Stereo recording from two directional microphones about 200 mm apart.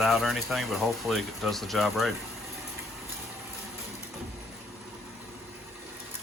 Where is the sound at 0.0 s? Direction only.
Centre (ahead or behind).